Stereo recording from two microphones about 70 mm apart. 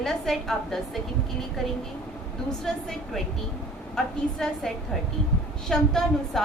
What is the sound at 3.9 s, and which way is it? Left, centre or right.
A woman's voice, centre.